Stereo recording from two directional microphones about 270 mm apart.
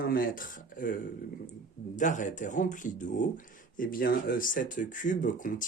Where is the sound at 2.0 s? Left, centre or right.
Left.